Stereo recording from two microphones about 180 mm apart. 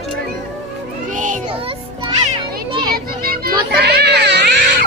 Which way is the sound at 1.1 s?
45° right (ahead or behind).